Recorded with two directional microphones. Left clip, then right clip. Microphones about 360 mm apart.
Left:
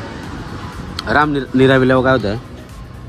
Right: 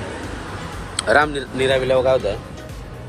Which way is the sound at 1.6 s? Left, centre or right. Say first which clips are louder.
Left 3 dB; left.